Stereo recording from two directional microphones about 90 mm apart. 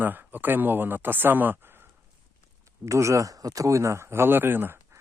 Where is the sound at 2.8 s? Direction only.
35° right (ahead or behind).